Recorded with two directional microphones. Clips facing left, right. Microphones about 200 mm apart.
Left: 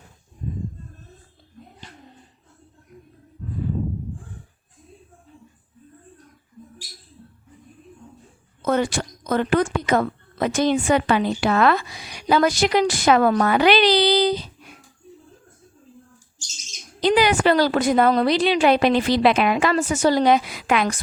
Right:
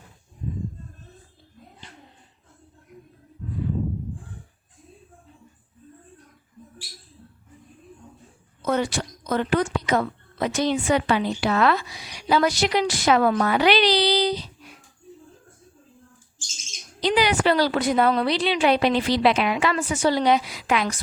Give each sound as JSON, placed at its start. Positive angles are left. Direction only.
{"t": 8.6, "sound": "a woman's voice", "side_deg": 50}
{"t": 17.0, "sound": "a woman's voice", "side_deg": 50}